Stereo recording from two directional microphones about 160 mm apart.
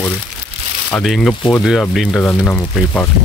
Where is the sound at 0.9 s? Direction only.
Centre (ahead or behind).